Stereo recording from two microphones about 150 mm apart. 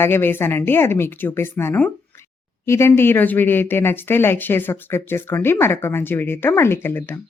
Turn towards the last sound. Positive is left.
turn(degrees=15)  # may be behind; listen again after turning